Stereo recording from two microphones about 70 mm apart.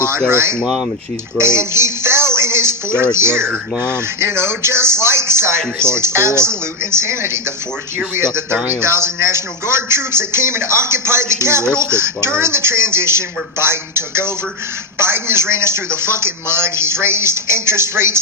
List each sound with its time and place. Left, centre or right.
0.3 s speech: right
0.6 s speech: centre
1.4 s a sound: right
3.0 s speech: right